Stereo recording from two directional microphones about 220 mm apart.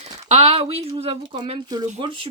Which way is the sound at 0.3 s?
25° right (ahead or behind).